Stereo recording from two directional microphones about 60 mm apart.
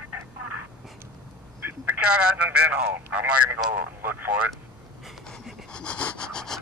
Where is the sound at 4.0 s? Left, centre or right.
Right.